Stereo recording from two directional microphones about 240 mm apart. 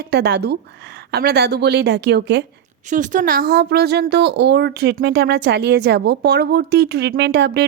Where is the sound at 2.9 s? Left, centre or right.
Right.